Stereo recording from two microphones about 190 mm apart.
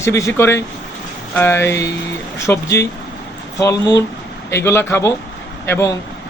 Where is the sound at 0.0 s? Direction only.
15° left (ahead or behind).